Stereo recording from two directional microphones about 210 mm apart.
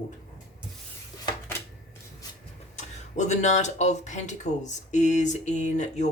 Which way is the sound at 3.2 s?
35° left (ahead or behind).